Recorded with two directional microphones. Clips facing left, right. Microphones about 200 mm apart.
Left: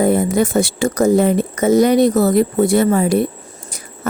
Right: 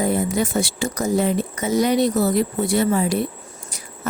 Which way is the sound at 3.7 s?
50° left (ahead or behind).